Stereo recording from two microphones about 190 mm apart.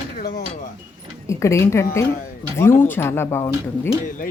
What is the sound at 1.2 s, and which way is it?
Speech, 15° left (ahead or behind).